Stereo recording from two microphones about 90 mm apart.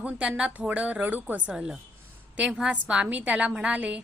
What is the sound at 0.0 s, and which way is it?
A woman's voice, 15° right (ahead or behind).